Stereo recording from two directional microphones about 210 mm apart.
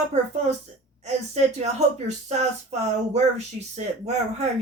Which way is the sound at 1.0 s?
30° right (ahead or behind).